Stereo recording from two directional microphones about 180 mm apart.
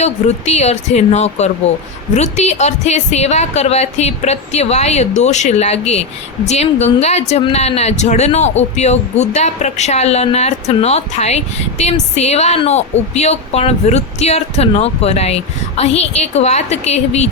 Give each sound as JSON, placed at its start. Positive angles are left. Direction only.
{"t": 0.0, "sound": "a woman's voice", "side_deg": 35}